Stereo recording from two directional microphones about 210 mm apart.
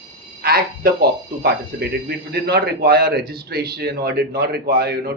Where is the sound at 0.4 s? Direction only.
45° right (ahead or behind).